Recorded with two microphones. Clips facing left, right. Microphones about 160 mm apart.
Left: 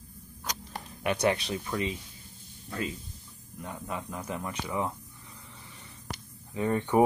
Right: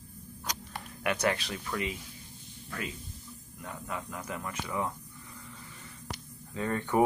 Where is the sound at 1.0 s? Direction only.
30° left (ahead or behind).